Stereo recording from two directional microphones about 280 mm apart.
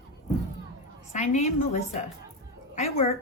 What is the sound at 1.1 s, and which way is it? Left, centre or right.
A woman's voice, left.